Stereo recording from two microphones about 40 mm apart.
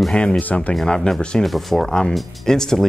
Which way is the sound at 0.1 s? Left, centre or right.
Left.